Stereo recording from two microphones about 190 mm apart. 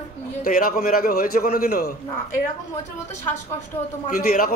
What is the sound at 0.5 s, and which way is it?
A man's voice, 50° left (ahead or behind).